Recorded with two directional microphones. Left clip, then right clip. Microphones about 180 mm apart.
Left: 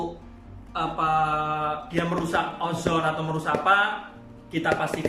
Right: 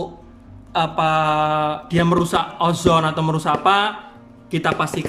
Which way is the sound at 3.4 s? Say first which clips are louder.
Right 4 dB; 60° right (ahead or behind).